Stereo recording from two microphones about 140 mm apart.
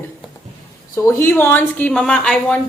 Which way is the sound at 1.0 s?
20° left (ahead or behind).